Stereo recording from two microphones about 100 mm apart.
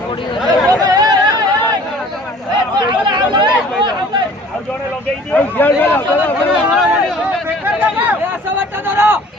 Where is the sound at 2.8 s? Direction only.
45° right (ahead or behind).